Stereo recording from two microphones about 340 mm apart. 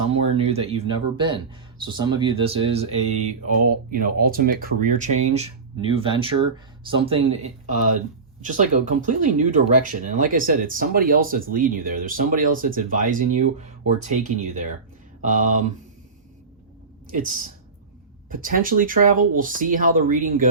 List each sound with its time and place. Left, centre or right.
0.1 s speech: centre
17.1 s speech: right